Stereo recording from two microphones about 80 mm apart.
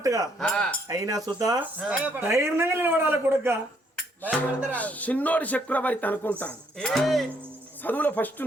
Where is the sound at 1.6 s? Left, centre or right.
Centre.